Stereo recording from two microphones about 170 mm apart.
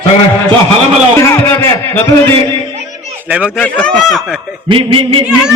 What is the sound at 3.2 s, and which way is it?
Speech, 5° right (ahead or behind).